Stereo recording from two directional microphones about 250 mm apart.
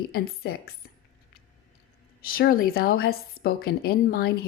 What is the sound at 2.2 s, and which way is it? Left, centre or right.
A woman's voice, left.